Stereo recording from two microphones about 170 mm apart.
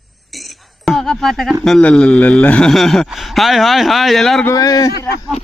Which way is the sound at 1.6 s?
5° left (ahead or behind).